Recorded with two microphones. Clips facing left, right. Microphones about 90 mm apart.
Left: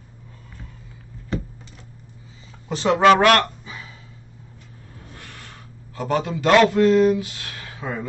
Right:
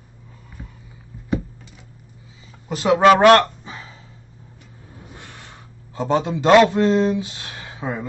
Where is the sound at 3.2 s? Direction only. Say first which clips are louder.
Right 5 dB; 30° right (ahead or behind).